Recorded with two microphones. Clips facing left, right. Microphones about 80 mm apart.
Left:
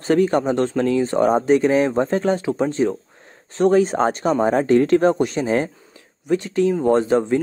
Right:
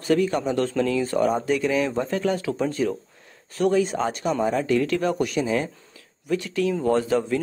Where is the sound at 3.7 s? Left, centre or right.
Left.